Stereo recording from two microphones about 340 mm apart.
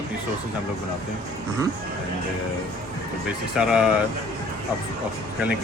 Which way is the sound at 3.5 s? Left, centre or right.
Centre.